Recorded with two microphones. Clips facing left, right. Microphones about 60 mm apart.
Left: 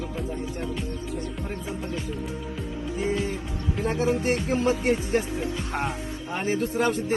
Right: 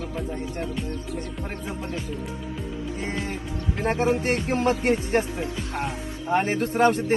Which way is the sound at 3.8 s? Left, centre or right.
Right.